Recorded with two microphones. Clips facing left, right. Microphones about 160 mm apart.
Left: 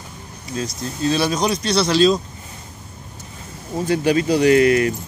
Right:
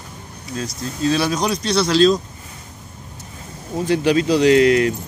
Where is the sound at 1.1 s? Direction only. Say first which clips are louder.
Even; centre (ahead or behind).